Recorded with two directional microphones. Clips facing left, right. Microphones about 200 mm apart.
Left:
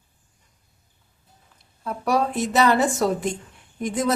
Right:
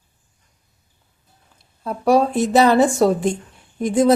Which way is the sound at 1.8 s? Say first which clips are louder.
Right 6 dB; 30° right (ahead or behind).